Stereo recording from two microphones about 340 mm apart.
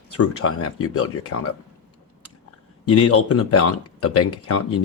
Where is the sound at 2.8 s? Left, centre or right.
Left.